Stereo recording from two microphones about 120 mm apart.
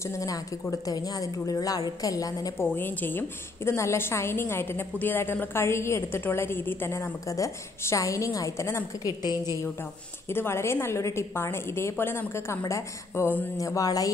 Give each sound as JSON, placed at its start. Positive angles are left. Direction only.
{"t": 0.0, "sound": "a woman's voice", "side_deg": 25}
{"t": 2.6, "sound": "a woman's voice", "side_deg": 15}
{"t": 10.3, "sound": "a woman's voice", "side_deg": 20}